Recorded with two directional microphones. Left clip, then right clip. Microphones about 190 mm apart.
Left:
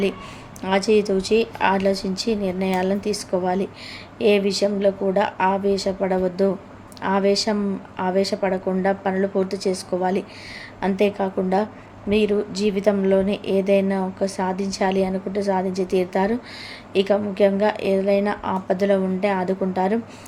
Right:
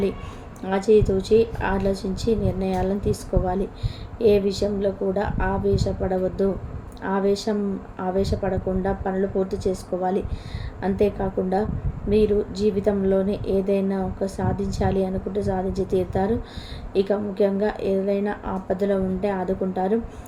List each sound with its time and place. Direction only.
0.6 s a woman's voice: 15° left (ahead or behind)
10.8 s a woman's voice: 15° left (ahead or behind)